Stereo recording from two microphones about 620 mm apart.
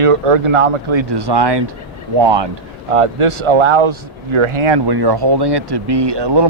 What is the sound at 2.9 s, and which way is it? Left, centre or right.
Speech, right.